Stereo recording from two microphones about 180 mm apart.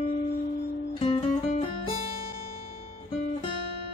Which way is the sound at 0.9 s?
30° left (ahead or behind).